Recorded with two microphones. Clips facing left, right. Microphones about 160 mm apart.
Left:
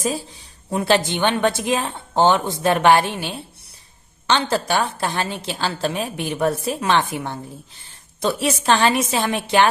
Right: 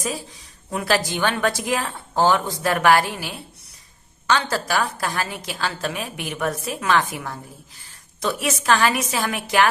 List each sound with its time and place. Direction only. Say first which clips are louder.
0.0 s a woman's voice: left 4 dB; 30° left (ahead or behind)